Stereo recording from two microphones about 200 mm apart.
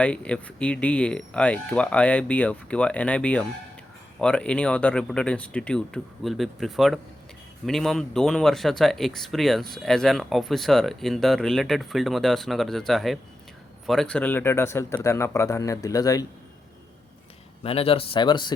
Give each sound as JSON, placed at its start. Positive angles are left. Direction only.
{"t": 0.0, "sound": "speech", "side_deg": 5}
{"t": 17.6, "sound": "speech", "side_deg": 30}